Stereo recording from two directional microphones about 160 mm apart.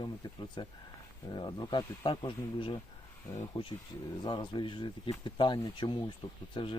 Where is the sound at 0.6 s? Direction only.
30° left (ahead or behind).